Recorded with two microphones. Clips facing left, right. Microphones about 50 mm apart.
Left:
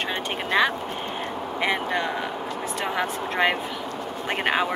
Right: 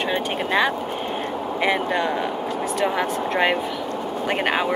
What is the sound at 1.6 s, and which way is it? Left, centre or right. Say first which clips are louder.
Speech: right 3 dB; centre.